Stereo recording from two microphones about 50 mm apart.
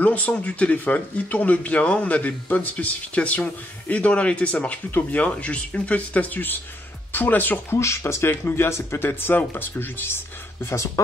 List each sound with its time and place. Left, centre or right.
0.0 s speech: left
7.7 s speech: left
9.2 s speech: left